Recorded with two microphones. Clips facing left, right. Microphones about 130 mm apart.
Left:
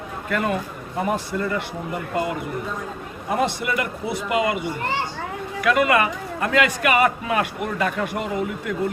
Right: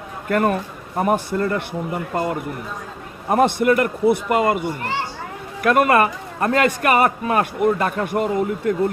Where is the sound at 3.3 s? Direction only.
50° right (ahead or behind).